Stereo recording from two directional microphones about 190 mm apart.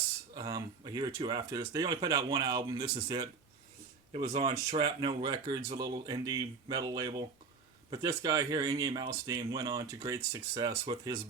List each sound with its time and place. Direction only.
0.3 s speech: 20° right (ahead or behind)
4.1 s speech: 30° right (ahead or behind)